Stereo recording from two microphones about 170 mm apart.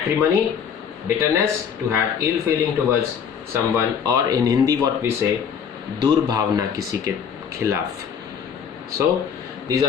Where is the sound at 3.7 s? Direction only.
20° right (ahead or behind).